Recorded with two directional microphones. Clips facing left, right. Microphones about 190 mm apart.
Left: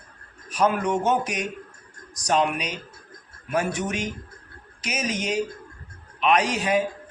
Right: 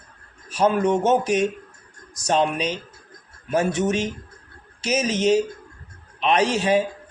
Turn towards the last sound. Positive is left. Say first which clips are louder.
# right 3 dB
turn(degrees=-30)  # may be behind; listen again after turning